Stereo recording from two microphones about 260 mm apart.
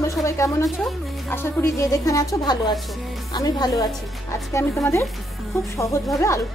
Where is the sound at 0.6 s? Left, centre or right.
Centre.